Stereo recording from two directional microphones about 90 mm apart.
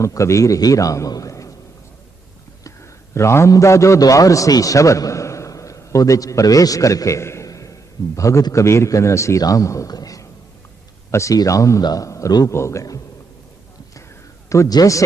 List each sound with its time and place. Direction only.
0.0 s a man's voice: 35° left (ahead or behind)
2.6 s a man's voice: 30° left (ahead or behind)
11.8 s a man's voice: 50° left (ahead or behind)
12.0 s a man's voice: 35° left (ahead or behind)
14.7 s a man's voice: 40° left (ahead or behind)